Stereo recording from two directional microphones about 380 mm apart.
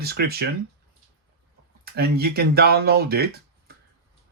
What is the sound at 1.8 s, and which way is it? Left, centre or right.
Speech, right.